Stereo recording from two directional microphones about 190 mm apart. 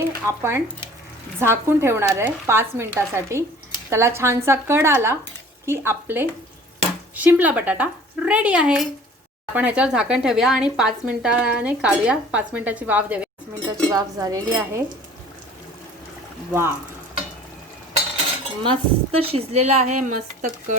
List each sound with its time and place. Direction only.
0.3 s speech: 15° right (ahead or behind)
13.6 s speech: 5° left (ahead or behind)
13.9 s speech: 20° right (ahead or behind)
16.5 s speech: 15° right (ahead or behind)
18.6 s a woman's voice: 30° right (ahead or behind)